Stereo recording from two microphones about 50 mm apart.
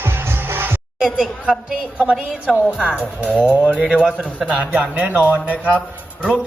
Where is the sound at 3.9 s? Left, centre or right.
Centre.